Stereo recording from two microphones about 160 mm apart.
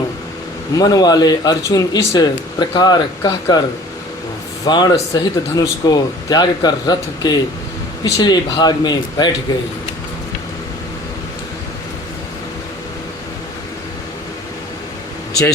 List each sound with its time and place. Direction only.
0.8 s a man's voice: 25° left (ahead or behind)
4.6 s a man's voice: 25° left (ahead or behind)